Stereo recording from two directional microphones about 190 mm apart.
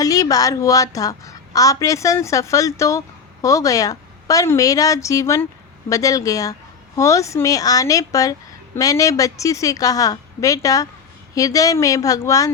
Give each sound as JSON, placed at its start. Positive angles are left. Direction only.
{"t": 0.0, "sound": "a woman's voice", "side_deg": 20}